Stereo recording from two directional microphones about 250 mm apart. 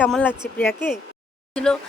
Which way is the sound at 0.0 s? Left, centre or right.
Centre.